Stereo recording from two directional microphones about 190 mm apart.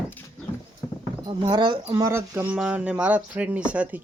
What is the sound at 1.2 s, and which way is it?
Speech, 20° right (ahead or behind).